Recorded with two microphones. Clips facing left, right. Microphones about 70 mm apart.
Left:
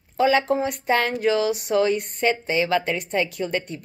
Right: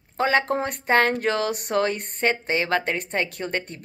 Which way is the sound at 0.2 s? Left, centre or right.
Right.